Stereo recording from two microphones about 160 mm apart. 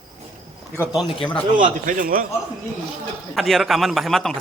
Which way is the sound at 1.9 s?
60° right (ahead or behind).